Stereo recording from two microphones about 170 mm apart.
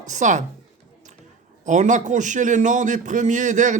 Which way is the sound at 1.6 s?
45° right (ahead or behind).